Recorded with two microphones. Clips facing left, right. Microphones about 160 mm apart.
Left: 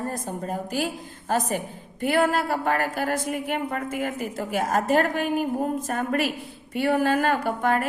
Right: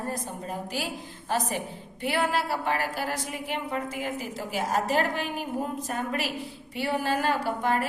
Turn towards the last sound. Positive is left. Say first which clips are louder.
# left 3 dB
turn(degrees=55)  # may be behind; listen again after turning